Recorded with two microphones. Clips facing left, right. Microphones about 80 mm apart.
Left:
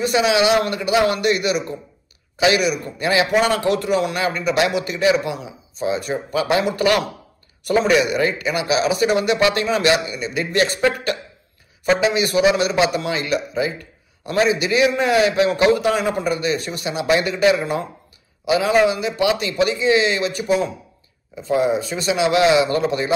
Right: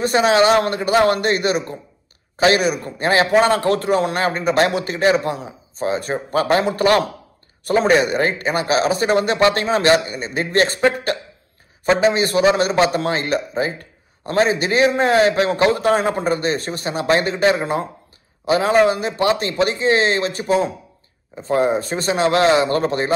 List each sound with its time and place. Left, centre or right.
0.0 s a man's voice: right